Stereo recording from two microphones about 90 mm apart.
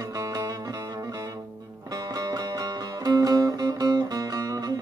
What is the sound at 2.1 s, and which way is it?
Music, 45° right (ahead or behind).